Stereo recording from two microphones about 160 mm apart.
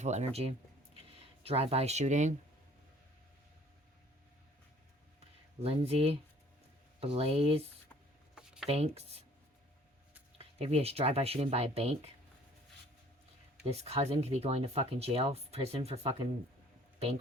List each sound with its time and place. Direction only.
0.0 s speech: 45° right (ahead or behind)
5.6 s speech: 35° right (ahead or behind)
8.4 s a sound: 5° right (ahead or behind)
8.7 s speech: 40° right (ahead or behind)
10.3 s speech: 40° right (ahead or behind)
13.7 s speech: 40° right (ahead or behind)